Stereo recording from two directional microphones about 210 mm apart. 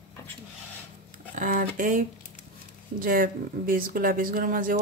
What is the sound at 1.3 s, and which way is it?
A woman's voice, 40° right (ahead or behind).